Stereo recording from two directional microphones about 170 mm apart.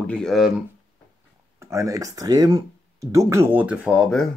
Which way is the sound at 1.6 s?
15° right (ahead or behind).